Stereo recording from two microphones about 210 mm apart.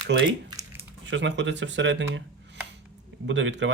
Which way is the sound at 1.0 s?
60° right (ahead or behind).